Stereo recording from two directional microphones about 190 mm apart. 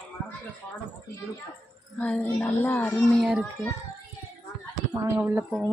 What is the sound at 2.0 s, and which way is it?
A woman's voice, 10° left (ahead or behind).